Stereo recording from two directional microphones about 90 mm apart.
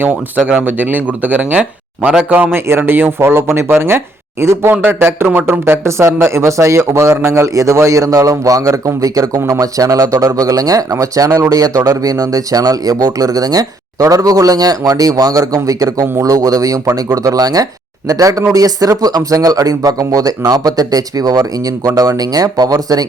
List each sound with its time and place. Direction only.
0.0 s speech: 20° right (ahead or behind); by 23.0 s 45° right (ahead or behind)